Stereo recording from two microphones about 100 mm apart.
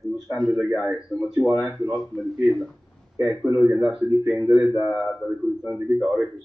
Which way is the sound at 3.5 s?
15° right (ahead or behind).